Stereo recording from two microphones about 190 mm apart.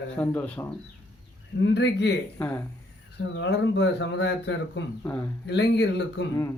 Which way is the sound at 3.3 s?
70° left (ahead or behind).